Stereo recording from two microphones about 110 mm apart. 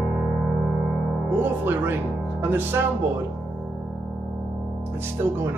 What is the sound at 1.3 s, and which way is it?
Speech, 20° right (ahead or behind).